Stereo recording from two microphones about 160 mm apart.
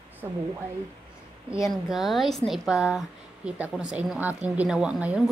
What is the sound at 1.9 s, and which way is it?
A woman's voice, centre (ahead or behind).